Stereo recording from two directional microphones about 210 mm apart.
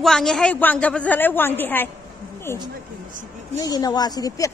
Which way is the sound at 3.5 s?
15° left (ahead or behind).